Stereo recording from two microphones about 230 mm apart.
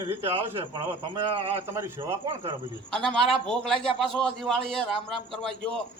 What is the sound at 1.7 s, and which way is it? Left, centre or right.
Speech, centre.